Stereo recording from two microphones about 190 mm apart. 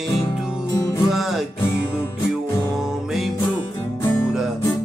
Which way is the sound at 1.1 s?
Centre (ahead or behind).